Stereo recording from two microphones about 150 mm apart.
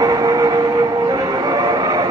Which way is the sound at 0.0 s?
25° right (ahead or behind).